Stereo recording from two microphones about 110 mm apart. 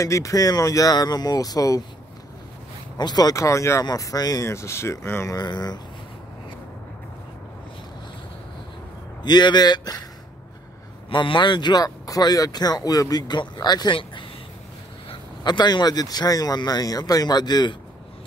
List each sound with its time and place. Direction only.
0.0 s speech: 30° left (ahead or behind)
3.0 s speech: 40° left (ahead or behind)
5.3 s speech: 40° left (ahead or behind)
9.2 s speech: 40° left (ahead or behind)
11.1 s speech: 50° left (ahead or behind)
15.4 s speech: 40° left (ahead or behind)